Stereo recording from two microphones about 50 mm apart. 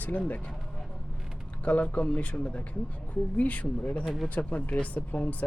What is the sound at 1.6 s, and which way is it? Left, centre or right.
A woman's voice, left.